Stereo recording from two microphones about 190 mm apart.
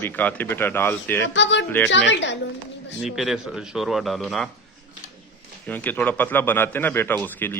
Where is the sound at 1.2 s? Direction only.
70° left (ahead or behind).